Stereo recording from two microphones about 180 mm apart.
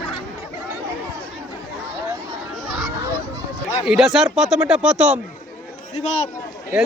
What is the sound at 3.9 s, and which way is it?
Speech, centre (ahead or behind).